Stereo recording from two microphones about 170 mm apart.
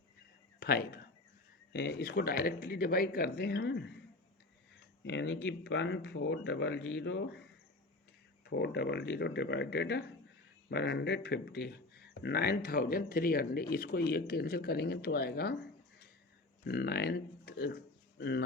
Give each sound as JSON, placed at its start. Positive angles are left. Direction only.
{"t": 0.6, "sound": "speech", "side_deg": 60}
{"t": 1.7, "sound": "speech", "side_deg": 75}
{"t": 5.0, "sound": "speech", "side_deg": 90}
{"t": 8.4, "sound": "speech", "side_deg": 80}
{"t": 16.6, "sound": "speech", "side_deg": 70}